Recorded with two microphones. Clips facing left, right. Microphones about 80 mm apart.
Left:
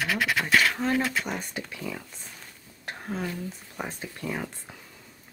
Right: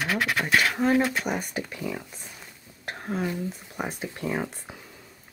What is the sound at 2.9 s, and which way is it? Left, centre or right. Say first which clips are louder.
Whispering: right 3 dB; centre.